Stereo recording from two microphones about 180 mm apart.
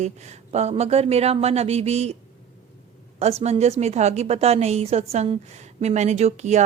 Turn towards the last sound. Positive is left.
turn(degrees=-40)  # may be behind; listen again after turning